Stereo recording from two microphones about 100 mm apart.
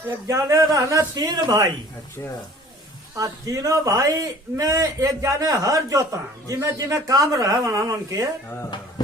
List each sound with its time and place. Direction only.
0.3 s a man's voice: 30° right (ahead or behind)
3.2 s a man's voice: 35° right (ahead or behind)